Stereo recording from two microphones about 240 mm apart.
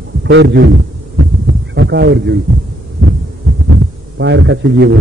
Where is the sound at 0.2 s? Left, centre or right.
Right.